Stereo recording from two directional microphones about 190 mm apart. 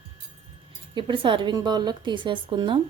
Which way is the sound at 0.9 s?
25° right (ahead or behind).